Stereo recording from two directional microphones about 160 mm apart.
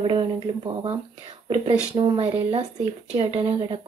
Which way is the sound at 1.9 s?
35° right (ahead or behind).